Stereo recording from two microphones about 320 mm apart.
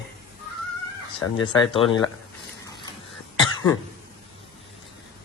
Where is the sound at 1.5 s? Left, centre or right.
Centre.